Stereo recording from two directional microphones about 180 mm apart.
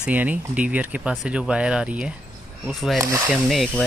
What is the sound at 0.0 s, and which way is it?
Speech, 10° right (ahead or behind).